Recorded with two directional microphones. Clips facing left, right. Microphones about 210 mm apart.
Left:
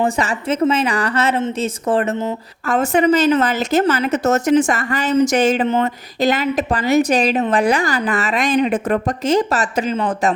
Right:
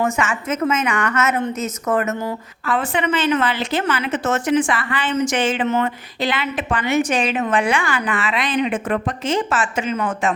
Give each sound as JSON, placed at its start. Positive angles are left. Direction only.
{"t": 0.0, "sound": "a woman's voice", "side_deg": 35}
{"t": 2.6, "sound": "a woman's voice", "side_deg": 45}